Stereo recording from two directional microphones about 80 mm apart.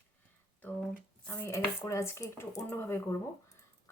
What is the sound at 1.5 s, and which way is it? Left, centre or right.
Chopping, left.